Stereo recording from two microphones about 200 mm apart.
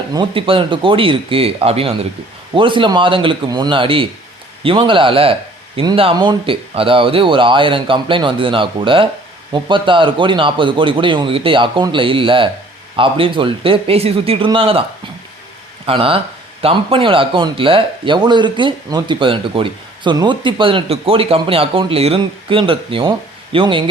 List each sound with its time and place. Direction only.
0.1 s speech: 25° right (ahead or behind)
15.9 s speech: 25° right (ahead or behind)